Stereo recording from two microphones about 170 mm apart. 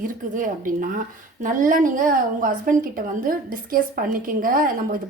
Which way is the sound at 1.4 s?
50° right (ahead or behind).